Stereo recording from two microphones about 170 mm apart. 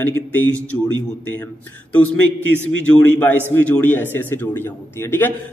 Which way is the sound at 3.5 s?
10° left (ahead or behind).